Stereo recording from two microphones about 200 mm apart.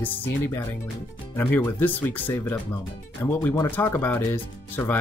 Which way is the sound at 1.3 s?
10° left (ahead or behind).